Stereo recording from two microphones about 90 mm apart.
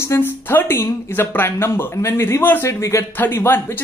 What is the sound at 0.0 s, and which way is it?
A woman's voice, 25° left (ahead or behind).